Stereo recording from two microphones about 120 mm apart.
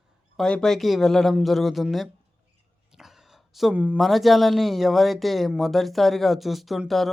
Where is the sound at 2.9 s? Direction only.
5° right (ahead or behind).